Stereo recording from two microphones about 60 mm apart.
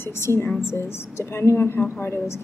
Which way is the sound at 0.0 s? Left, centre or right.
Left.